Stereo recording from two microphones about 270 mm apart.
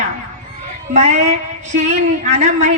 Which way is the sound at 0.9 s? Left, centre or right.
Right.